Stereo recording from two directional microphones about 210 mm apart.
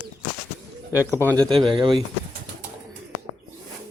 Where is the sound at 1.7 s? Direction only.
20° right (ahead or behind).